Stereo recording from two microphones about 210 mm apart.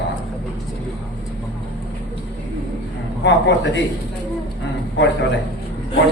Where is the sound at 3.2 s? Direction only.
55° left (ahead or behind).